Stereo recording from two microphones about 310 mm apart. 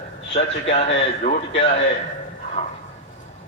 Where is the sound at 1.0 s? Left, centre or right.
Centre.